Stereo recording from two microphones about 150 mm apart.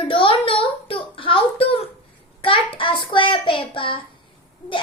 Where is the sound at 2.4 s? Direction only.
35° left (ahead or behind).